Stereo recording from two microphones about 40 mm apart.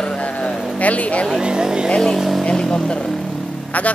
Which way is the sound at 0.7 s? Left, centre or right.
Left.